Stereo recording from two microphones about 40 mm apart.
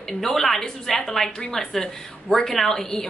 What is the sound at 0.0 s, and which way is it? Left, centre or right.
A woman's voice, centre.